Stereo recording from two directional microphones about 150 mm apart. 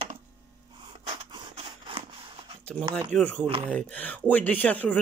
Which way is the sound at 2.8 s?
30° right (ahead or behind).